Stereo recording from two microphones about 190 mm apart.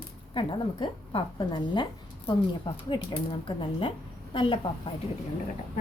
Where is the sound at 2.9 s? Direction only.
25° left (ahead or behind).